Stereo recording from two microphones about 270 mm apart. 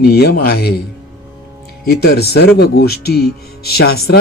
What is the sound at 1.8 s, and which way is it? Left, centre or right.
Speech, left.